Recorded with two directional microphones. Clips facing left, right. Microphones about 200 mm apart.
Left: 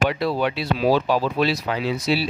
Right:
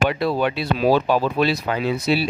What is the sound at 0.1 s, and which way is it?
Speech, 50° right (ahead or behind).